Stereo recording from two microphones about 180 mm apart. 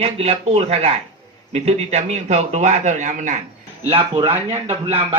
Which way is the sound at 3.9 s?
30° right (ahead or behind).